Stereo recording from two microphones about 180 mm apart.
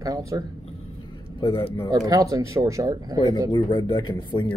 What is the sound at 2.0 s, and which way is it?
Speech, 20° right (ahead or behind).